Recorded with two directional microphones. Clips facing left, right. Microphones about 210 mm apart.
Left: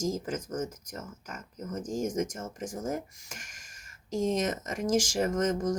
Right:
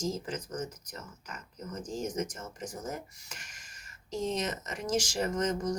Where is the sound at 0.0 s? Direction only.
45° left (ahead or behind).